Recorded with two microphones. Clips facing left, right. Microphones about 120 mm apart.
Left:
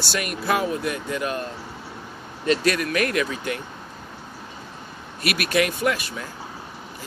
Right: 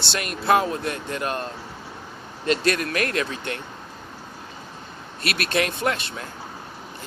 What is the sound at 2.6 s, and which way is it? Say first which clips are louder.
Speech: left 1 dB; 15° left (ahead or behind).